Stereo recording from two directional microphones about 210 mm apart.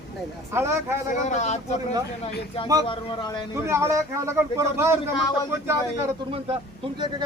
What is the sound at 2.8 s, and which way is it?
Speech, 20° left (ahead or behind).